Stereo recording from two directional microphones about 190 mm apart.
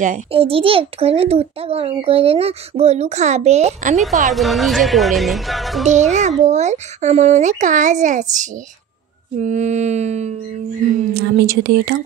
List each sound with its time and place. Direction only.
0.0 s a child's voice: 35° right (ahead or behind)
4.3 s speech: centre (ahead or behind)
5.9 s a child's voice: 40° right (ahead or behind)
11.2 s speech: 60° right (ahead or behind)